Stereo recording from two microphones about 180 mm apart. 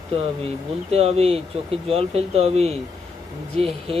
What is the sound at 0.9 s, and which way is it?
Speech, 35° right (ahead or behind).